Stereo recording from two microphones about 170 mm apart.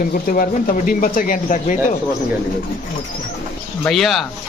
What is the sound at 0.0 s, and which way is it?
Speech, 55° left (ahead or behind).